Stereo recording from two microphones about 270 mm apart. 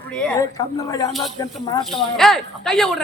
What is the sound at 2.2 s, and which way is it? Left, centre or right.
Speech, centre.